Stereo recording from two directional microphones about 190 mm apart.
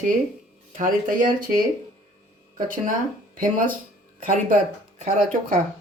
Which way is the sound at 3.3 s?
45° right (ahead or behind).